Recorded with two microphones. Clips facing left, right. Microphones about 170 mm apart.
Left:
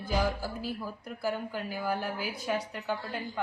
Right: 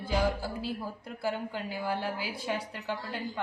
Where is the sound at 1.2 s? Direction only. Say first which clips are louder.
Even; 25° right (ahead or behind).